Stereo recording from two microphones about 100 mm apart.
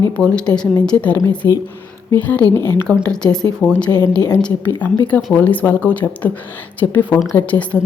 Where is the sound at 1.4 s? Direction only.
25° left (ahead or behind).